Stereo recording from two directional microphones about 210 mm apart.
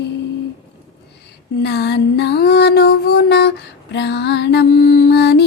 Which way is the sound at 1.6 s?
50° left (ahead or behind).